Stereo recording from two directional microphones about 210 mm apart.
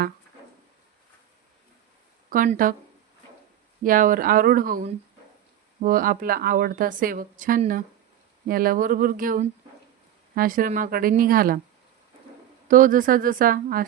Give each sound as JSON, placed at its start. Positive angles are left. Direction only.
{"t": 2.3, "sound": "a woman's voice", "side_deg": -40}
{"t": 3.8, "sound": "a woman's voice", "side_deg": -40}
{"t": 12.6, "sound": "a woman's voice", "side_deg": -40}